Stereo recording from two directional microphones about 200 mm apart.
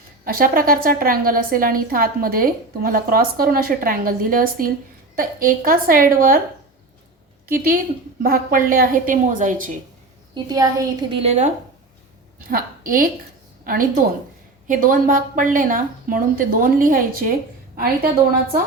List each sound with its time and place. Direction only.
0.3 s a woman's voice: 45° right (ahead or behind)
7.4 s a woman's voice: 45° right (ahead or behind)
10.3 s a woman's voice: 20° right (ahead or behind)
11.2 s speech: 35° right (ahead or behind)
12.4 s a woman's voice: 45° right (ahead or behind)